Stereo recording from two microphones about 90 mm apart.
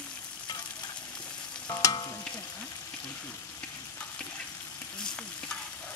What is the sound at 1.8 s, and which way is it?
Frying, 40° left (ahead or behind).